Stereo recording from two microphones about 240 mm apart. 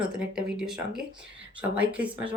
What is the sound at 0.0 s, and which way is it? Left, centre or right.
Speech, centre.